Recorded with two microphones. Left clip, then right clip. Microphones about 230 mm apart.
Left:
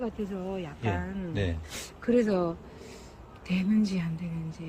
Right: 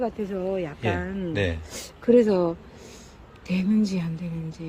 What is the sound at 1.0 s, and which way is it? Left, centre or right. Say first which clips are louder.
Speech: right 6 dB; right.